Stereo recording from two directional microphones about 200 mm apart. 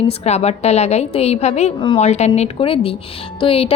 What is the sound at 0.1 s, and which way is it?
A woman's voice, 30° left (ahead or behind).